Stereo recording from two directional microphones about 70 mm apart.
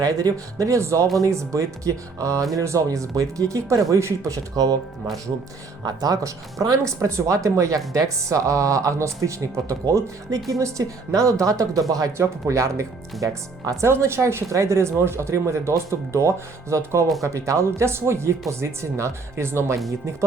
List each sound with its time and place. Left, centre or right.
0.0 s speech: right
5.8 s speech: right
12.1 s speech: right
13.8 s speech: right